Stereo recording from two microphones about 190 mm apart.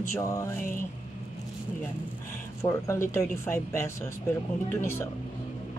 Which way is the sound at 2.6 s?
15° left (ahead or behind).